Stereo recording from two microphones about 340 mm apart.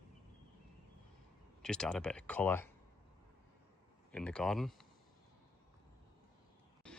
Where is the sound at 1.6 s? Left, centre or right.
Centre.